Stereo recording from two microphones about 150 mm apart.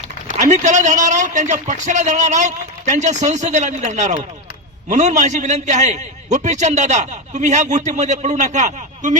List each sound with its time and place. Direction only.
0.3 s a man's voice: 55° right (ahead or behind)